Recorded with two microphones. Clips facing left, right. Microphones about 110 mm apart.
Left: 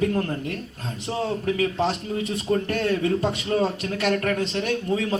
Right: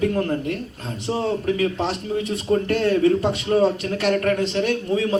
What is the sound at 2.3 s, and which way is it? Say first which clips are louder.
A man's voice: right 4 dB; 30° right (ahead or behind).